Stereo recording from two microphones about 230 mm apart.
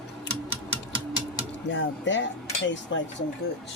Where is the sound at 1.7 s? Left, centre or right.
Left.